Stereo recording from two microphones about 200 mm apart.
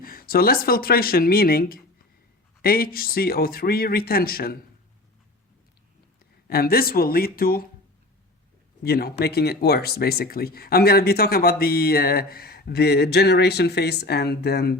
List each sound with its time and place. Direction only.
0.0 s speech: 45° left (ahead or behind)
6.5 s speech: 50° left (ahead or behind)
8.8 s speech: 50° left (ahead or behind)